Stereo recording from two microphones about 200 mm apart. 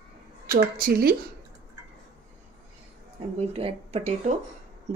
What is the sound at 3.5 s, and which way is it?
Speech, 30° right (ahead or behind).